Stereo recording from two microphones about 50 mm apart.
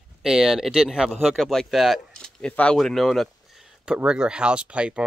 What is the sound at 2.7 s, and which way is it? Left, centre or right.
Speech, centre.